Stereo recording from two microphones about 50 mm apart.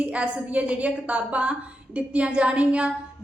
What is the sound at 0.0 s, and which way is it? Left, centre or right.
A woman's voice, right.